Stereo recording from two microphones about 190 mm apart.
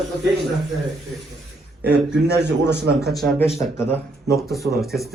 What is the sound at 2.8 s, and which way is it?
Speech, 60° right (ahead or behind).